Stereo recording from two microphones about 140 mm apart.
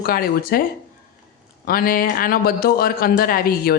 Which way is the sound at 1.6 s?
90° left.